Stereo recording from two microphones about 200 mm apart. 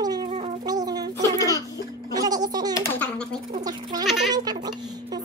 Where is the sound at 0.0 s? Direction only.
20° right (ahead or behind).